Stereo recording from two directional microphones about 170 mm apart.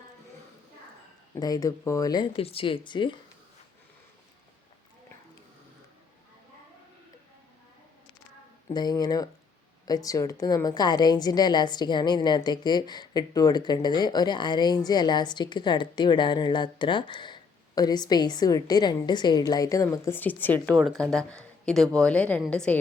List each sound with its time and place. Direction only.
1.4 s a woman's voice: 20° left (ahead or behind)
8.7 s a woman's voice: 25° left (ahead or behind); by 22.8 s 5° left (ahead or behind)